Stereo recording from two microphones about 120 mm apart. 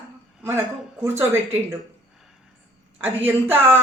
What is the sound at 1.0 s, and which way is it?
Speech, 20° right (ahead or behind).